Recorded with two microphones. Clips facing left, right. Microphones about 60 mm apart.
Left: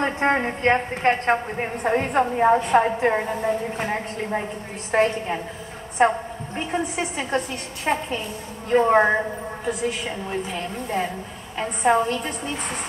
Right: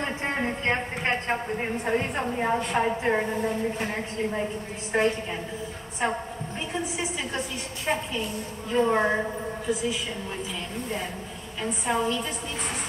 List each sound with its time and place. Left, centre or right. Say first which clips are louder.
0.0 s a woman's voice: left 7 dB; left
2.0 s a woman's voice: left 7 dB; left
4.9 s a woman's voice: left 4 dB; left
8.6 s a woman's voice: left 6 dB; left
11.8 s a woman's voice: left 7 dB; left